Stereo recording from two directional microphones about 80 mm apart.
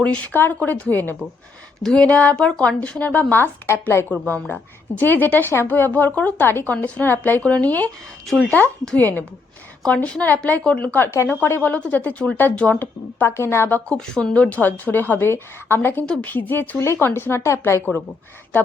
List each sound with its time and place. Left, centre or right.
0.0 s a woman's voice: centre
1.8 s speech: centre
2.0 s a woman's voice: centre
6.8 s a woman's voice: centre
11.1 s a woman's voice: left
13.3 s speech: left
13.8 s a woman's voice: centre; by 18.0 s left